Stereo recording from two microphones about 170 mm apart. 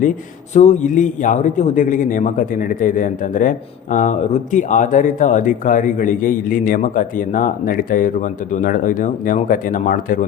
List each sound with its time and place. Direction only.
0.5 s a man's voice: 45° left (ahead or behind)